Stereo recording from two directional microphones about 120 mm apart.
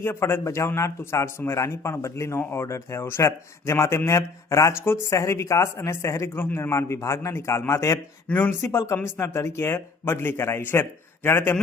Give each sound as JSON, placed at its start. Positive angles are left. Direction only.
{"t": 0.0, "sound": "a man's voice", "side_deg": 20}